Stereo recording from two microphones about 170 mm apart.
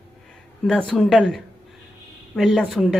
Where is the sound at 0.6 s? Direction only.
5° left (ahead or behind).